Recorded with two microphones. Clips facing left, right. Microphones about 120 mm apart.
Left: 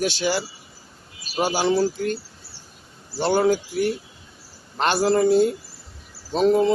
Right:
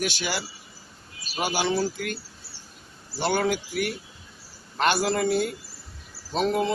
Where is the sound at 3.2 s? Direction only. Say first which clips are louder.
Left 5 dB; 30° left (ahead or behind).